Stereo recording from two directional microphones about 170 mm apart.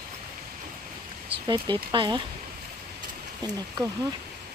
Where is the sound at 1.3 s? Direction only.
25° right (ahead or behind).